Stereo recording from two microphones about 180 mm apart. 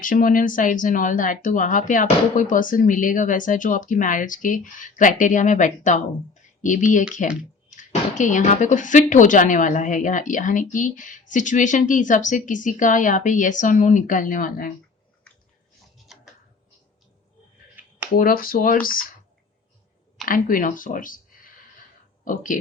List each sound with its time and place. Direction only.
0.0 s a woman's voice: 50° left (ahead or behind)
17.8 s a sound: 10° right (ahead or behind)
18.1 s a woman's voice: 50° left (ahead or behind)
20.2 s a woman's voice: 50° left (ahead or behind)
22.2 s speech: 45° left (ahead or behind)